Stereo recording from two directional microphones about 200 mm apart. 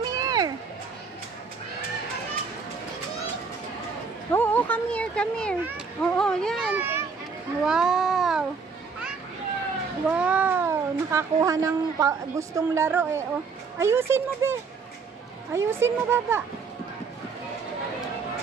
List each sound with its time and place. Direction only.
0.1 s music: 20° right (ahead or behind)
4.3 s a sound: 10° left (ahead or behind)
5.9 s a child's voice: 5° left (ahead or behind)
10.0 s speech: 5° right (ahead or behind)